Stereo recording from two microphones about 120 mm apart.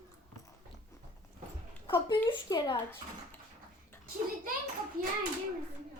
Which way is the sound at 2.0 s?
40° left (ahead or behind).